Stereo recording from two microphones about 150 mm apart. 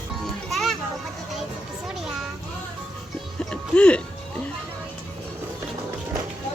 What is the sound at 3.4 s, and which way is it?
Music, 5° left (ahead or behind).